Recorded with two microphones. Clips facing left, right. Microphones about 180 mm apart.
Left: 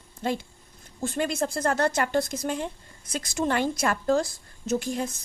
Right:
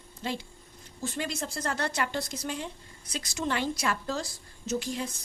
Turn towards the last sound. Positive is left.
turn(degrees=50)  # may be behind; listen again after turning